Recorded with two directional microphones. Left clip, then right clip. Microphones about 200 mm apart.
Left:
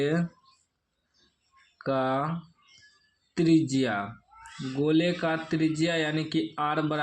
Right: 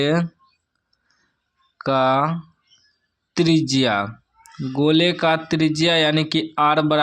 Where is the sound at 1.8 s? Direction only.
45° right (ahead or behind).